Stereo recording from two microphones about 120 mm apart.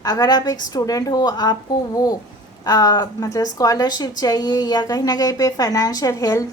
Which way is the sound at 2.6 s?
30° left (ahead or behind).